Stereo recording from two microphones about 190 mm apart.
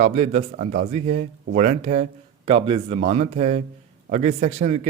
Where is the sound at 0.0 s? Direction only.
35° right (ahead or behind).